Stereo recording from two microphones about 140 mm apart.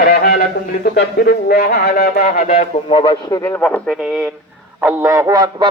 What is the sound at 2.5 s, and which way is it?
Speech, 40° left (ahead or behind).